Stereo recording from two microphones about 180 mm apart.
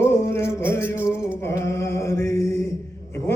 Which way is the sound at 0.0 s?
15° left (ahead or behind).